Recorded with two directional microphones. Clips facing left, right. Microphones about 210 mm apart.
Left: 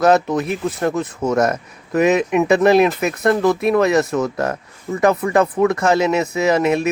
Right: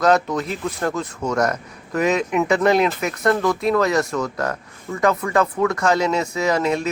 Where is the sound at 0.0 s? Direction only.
25° left (ahead or behind).